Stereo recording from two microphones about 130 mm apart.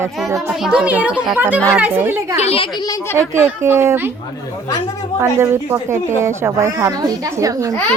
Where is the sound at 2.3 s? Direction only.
50° left (ahead or behind).